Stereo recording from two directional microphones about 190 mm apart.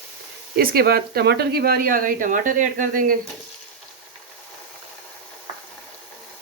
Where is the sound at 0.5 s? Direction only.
50° right (ahead or behind).